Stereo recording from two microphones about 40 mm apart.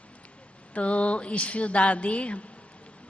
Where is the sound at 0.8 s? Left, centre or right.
Left.